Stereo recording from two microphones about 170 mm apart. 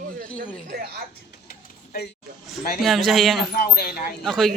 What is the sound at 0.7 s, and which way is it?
Speech, 70° right (ahead or behind).